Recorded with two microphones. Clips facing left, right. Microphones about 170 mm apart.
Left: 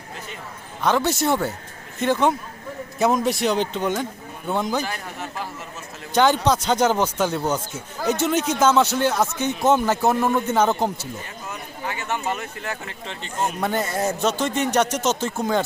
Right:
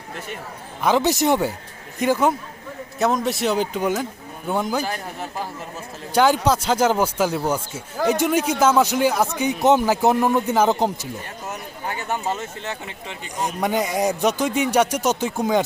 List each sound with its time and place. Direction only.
0.8 s speech: 15° right (ahead or behind)
4.9 s speech: 40° right (ahead or behind)
6.1 s speech: 10° right (ahead or behind)
11.4 s a sound: 40° right (ahead or behind)
13.6 s speech: 15° right (ahead or behind)